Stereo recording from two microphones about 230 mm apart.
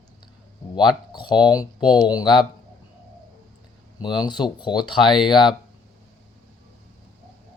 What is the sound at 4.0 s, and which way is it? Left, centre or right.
Speech, centre.